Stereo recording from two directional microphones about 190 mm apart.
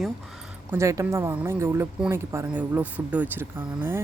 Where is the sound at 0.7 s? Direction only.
15° right (ahead or behind).